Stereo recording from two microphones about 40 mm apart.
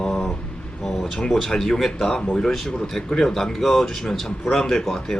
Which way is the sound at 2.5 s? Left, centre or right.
Centre.